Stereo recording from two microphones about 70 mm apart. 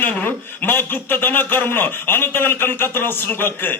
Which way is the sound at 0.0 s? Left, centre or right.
Left.